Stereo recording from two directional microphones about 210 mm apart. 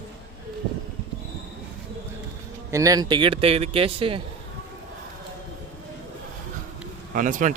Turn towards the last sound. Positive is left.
turn(degrees=-40)  # may be behind; listen again after turning